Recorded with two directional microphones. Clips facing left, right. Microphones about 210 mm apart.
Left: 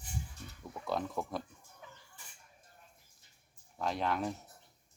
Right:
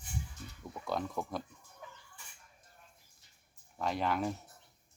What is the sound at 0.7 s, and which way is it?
Speech, centre (ahead or behind).